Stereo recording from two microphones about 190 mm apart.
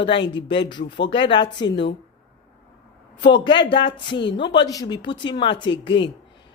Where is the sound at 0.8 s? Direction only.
65° left (ahead or behind).